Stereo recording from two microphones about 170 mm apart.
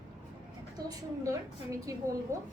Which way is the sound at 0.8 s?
20° right (ahead or behind).